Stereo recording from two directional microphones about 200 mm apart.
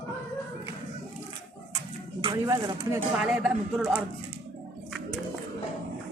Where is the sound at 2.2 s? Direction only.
25° right (ahead or behind).